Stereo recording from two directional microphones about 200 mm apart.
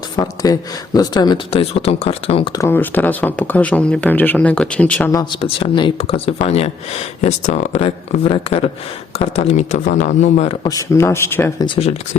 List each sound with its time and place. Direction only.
0.2 s speech: 20° left (ahead or behind)
5.4 s speech: 25° left (ahead or behind)
11.6 s speech: 25° left (ahead or behind)